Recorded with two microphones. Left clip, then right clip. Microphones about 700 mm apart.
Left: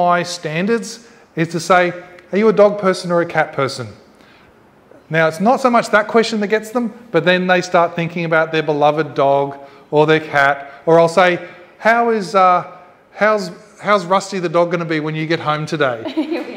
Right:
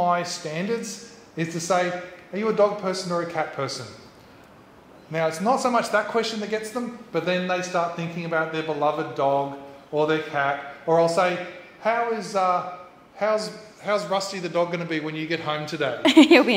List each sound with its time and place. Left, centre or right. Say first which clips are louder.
0.0 s a man's voice: left 8 dB; left
5.1 s a man's voice: left 8 dB; left
16.1 s a woman's voice: right 7 dB; right